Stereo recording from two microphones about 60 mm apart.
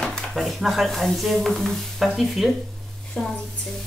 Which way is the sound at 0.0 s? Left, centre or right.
Centre.